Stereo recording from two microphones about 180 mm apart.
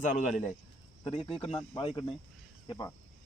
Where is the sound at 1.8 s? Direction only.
30° left (ahead or behind).